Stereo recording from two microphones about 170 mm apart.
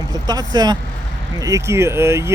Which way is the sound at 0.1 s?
25° right (ahead or behind).